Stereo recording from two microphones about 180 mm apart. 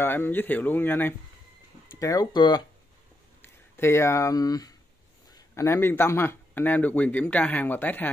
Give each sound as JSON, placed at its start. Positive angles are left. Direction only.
{"t": 0.0, "sound": "speech", "side_deg": 10}
{"t": 3.4, "sound": "speech", "side_deg": 15}